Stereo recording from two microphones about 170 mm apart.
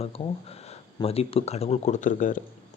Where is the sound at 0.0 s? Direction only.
35° left (ahead or behind).